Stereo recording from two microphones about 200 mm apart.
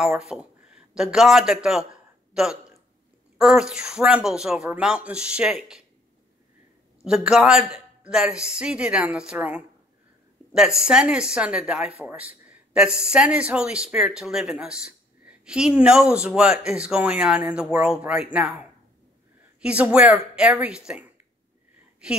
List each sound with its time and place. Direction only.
0.0 s speech: centre (ahead or behind)
7.1 s a man's voice: 5° right (ahead or behind)